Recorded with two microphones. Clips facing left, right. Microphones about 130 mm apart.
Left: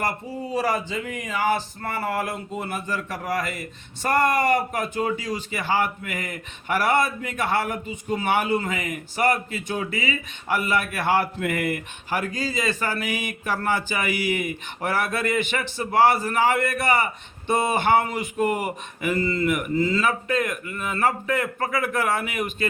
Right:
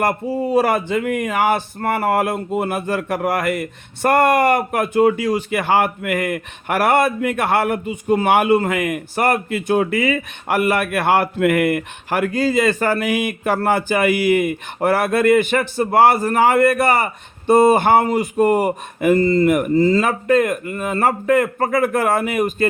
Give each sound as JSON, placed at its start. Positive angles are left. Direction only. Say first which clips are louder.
{"t": 0.0, "sound": "speech", "louder": "right 9 dB", "side_deg": -55}